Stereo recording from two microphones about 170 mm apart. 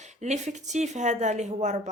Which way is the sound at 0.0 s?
45° right (ahead or behind).